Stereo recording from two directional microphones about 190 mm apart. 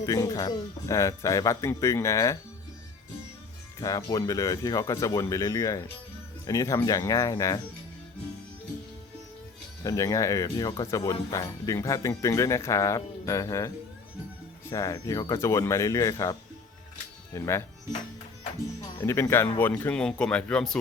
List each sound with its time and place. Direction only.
0.0 s speech: 20° left (ahead or behind)
3.8 s speech: 20° left (ahead or behind)
9.8 s speech: 15° left (ahead or behind)
14.7 s speech: 15° left (ahead or behind)
18.9 s speech: 15° left (ahead or behind)